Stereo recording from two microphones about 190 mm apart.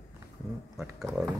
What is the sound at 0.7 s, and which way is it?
Speech, centre (ahead or behind).